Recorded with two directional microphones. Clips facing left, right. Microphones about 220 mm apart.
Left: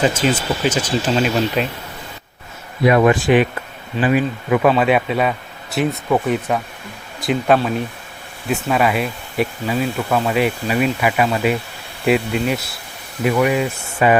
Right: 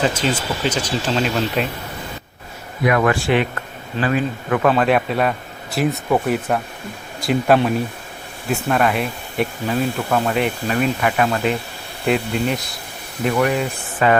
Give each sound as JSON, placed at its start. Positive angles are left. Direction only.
{"t": 0.2, "sound": "speech", "side_deg": 10}
{"t": 2.8, "sound": "speech", "side_deg": 20}